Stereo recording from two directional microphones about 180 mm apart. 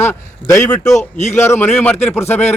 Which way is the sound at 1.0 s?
40° left (ahead or behind).